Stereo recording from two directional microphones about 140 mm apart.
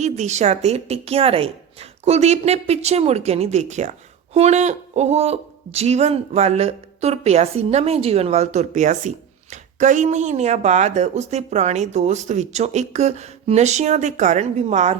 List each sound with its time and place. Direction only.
0.0 s speech: 55° right (ahead or behind)